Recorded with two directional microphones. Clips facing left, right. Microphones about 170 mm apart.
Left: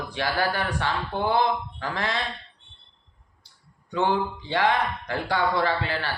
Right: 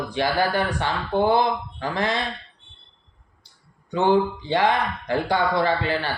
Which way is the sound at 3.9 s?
20° right (ahead or behind).